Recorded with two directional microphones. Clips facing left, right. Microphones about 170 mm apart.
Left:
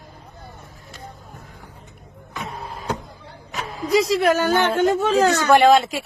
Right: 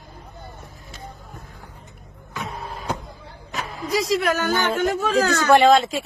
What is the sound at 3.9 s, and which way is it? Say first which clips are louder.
A woman's voice: left 4 dB; 30° left (ahead or behind).